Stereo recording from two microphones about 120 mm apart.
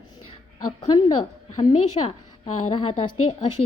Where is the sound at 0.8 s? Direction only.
35° left (ahead or behind).